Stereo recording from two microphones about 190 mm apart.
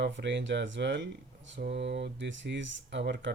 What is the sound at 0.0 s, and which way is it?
Speech, 65° right (ahead or behind).